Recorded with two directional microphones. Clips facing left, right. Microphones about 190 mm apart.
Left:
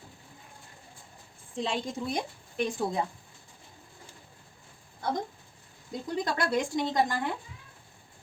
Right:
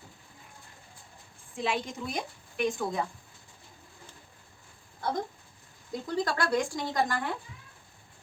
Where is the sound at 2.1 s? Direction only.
25° left (ahead or behind).